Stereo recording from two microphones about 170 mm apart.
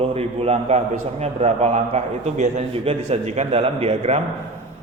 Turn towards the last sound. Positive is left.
turn(degrees=-35)  # may be behind; listen again after turning